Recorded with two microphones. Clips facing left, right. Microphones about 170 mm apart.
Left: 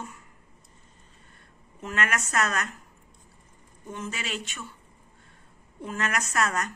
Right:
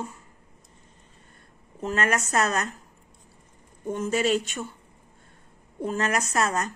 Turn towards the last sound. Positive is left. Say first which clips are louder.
# right 2 dB
turn(degrees=-30)  # may be behind; listen again after turning